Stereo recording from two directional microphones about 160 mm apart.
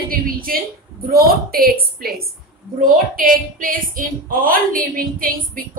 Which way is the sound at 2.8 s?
60° right (ahead or behind).